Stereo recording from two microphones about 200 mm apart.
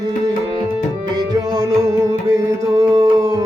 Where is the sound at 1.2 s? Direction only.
20° right (ahead or behind).